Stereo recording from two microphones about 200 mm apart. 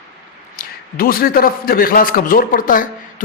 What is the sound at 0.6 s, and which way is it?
A man's voice, 45° left (ahead or behind).